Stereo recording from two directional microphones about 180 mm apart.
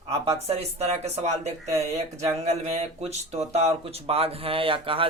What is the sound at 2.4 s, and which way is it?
Speech, 35° right (ahead or behind).